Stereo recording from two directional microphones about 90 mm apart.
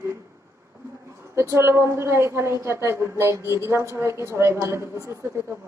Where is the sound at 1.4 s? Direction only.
30° right (ahead or behind).